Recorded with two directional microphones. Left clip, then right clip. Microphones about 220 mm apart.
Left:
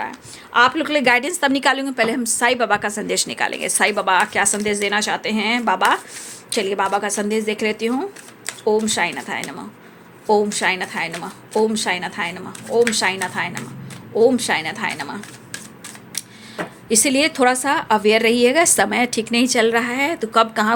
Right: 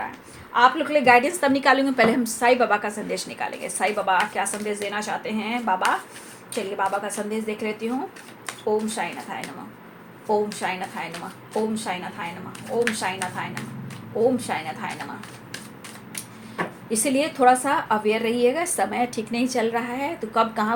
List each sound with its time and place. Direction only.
0.5 s a woman's voice: 45° left (ahead or behind)
16.9 s a woman's voice: 45° left (ahead or behind)